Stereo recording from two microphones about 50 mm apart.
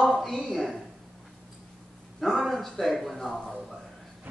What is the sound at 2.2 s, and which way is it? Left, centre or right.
Speech, centre.